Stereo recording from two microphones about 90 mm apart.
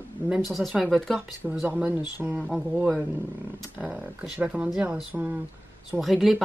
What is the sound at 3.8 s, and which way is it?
Speech, 15° right (ahead or behind).